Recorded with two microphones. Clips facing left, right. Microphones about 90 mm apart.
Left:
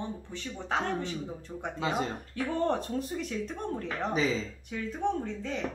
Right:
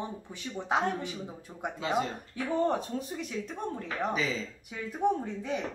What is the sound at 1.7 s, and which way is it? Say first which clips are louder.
Speech: right 1 dB; 30° left (ahead or behind).